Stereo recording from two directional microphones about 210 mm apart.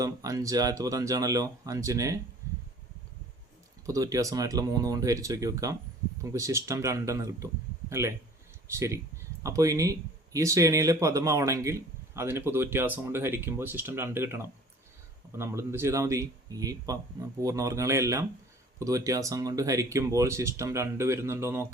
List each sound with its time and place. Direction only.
0.0 s speech: 15° right (ahead or behind)
3.8 s speech: 15° right (ahead or behind)